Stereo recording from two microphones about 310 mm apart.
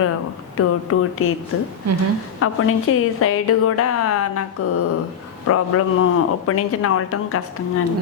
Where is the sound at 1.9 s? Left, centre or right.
Right.